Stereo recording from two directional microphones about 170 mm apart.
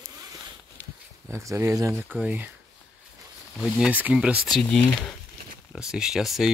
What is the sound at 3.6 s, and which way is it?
Speech, 5° right (ahead or behind).